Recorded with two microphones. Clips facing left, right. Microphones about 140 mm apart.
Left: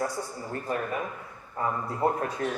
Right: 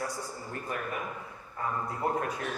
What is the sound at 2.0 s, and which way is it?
Speech, 30° left (ahead or behind).